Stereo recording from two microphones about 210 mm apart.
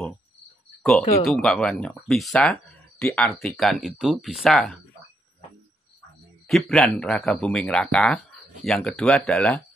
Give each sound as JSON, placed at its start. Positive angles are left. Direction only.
{"t": 0.8, "sound": "speech", "side_deg": 0}
{"t": 6.4, "sound": "speech", "side_deg": 0}